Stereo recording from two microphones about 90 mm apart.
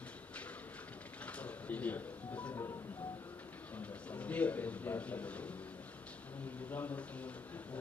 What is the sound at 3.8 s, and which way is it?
A man's voice, 15° left (ahead or behind).